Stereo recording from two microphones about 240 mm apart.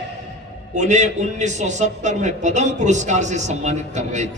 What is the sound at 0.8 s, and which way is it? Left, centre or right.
A man's voice, right.